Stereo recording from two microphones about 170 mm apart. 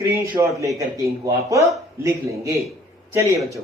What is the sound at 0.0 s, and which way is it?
Speech, 20° right (ahead or behind).